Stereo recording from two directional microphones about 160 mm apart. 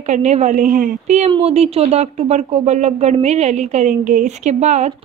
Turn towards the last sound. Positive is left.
turn(degrees=-45)  # may be behind; listen again after turning